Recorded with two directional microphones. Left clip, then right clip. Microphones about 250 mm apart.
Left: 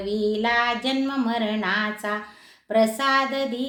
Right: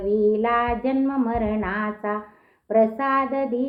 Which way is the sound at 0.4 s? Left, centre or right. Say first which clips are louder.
Even; centre.